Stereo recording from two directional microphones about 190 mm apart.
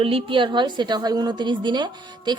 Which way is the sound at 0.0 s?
30° right (ahead or behind).